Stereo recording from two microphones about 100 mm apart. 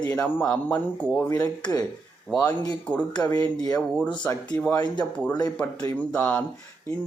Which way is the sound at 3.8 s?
10° left (ahead or behind).